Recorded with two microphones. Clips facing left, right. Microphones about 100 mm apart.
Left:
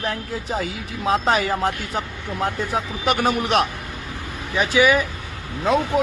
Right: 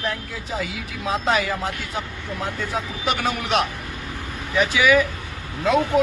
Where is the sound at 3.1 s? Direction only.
45° left (ahead or behind).